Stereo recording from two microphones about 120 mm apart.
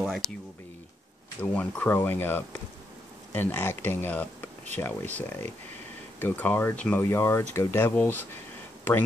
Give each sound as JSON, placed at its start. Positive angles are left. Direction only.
{"t": 1.4, "sound": "speech", "side_deg": 10}